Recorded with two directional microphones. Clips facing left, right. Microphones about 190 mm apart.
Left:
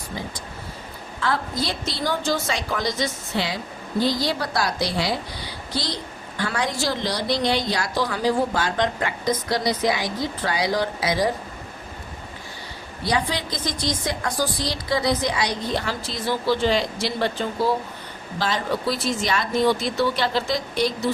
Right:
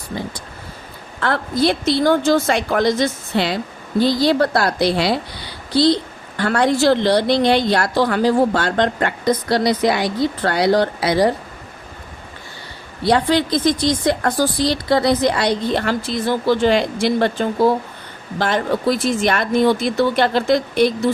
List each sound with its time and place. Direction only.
1.2 s a woman's voice: 60° right (ahead or behind)
6.3 s a woman's voice: 60° right (ahead or behind)
13.1 s a woman's voice: 65° right (ahead or behind)